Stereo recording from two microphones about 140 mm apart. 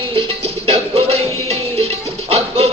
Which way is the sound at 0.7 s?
45° right (ahead or behind).